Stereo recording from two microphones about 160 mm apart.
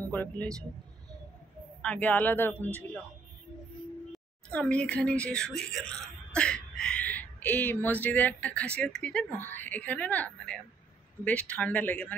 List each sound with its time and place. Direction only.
0.0 s speech: 10° left (ahead or behind)
1.8 s speech: 10° left (ahead or behind)
4.5 s speech: 5° left (ahead or behind)